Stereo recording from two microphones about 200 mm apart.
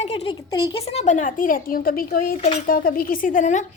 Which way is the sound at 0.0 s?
30° left (ahead or behind).